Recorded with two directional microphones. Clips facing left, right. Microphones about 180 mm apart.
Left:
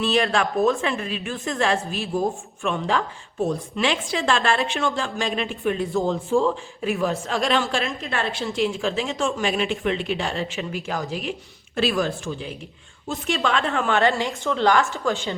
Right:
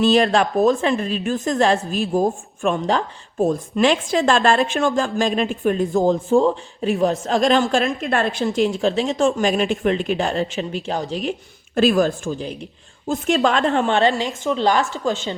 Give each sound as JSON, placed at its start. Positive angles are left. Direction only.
{"t": 0.0, "sound": "a woman's voice", "side_deg": -40}
{"t": 11.2, "sound": "a woman's voice", "side_deg": -45}